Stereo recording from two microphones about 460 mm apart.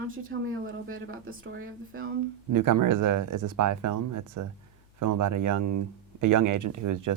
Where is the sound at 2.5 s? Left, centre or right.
Right.